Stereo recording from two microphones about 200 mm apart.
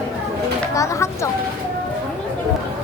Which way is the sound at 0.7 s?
15° left (ahead or behind).